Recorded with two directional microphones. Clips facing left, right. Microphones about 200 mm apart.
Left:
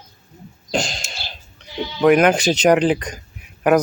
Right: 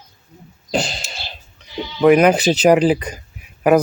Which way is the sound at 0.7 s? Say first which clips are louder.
Right 2 dB; 5° right (ahead or behind).